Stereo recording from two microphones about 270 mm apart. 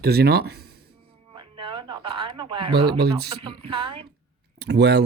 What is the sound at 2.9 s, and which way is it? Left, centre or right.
Speech, right.